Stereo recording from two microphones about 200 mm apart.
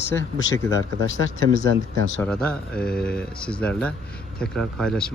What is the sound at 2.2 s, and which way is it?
Speech, 5° left (ahead or behind).